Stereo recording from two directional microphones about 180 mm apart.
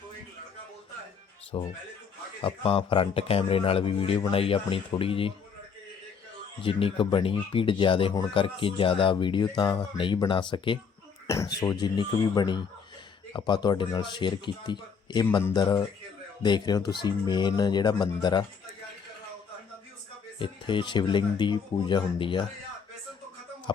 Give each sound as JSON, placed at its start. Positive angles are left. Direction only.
{"t": 1.5, "sound": "speech", "side_deg": 30}
{"t": 6.6, "sound": "speech", "side_deg": 30}
{"t": 20.4, "sound": "speech", "side_deg": 25}